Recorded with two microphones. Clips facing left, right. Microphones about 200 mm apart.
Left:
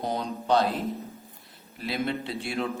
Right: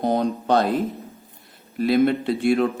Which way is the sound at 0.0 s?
55° right (ahead or behind).